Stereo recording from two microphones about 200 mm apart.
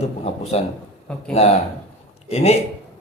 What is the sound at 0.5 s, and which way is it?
A man's voice, 30° left (ahead or behind).